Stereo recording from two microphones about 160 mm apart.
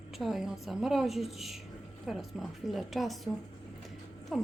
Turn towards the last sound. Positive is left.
turn(degrees=0)  # may be behind; listen again after turning